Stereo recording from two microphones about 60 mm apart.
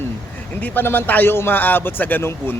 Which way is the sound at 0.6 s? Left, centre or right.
Left.